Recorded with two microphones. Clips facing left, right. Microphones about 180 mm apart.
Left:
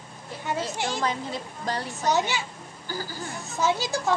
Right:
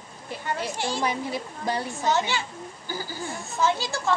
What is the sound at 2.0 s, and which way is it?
Speech, 20° left (ahead or behind).